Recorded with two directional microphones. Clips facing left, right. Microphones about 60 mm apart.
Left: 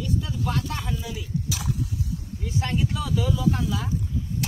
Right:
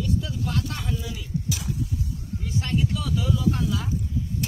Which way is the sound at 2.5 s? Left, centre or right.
Centre.